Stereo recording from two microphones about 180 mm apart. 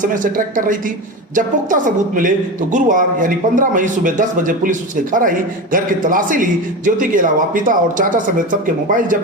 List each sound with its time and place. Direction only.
0.0 s a man's voice: 45° right (ahead or behind)